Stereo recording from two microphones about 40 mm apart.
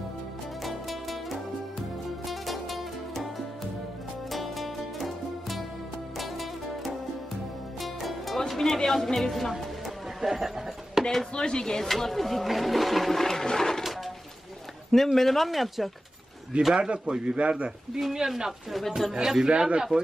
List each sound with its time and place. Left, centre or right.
0.7 s music: centre
4.3 s music: centre
9.5 s a sound: centre
11.3 s speech: left
11.9 s speech: centre
14.9 s speech: centre
16.5 s a man's voice: right
18.1 s speech: centre
18.7 s speech: centre
19.5 s a man's voice: right